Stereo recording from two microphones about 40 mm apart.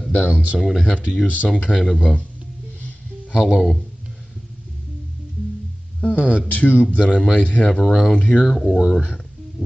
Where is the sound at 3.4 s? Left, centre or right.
Centre.